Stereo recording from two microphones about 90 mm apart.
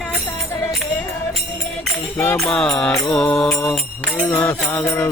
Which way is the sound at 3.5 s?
30° left (ahead or behind).